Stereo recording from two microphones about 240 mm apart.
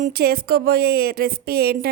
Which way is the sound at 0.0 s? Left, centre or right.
Right.